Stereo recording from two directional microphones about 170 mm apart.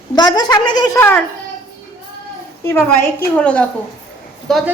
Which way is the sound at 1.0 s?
10° left (ahead or behind).